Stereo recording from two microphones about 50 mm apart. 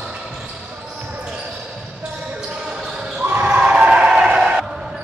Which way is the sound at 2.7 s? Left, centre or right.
Centre.